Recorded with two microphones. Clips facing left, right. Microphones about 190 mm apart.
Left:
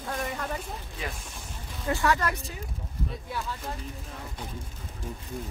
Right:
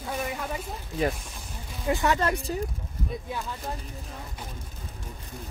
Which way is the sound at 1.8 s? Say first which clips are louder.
Right 2 dB; 20° right (ahead or behind).